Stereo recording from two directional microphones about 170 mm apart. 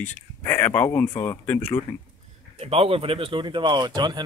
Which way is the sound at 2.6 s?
35° right (ahead or behind).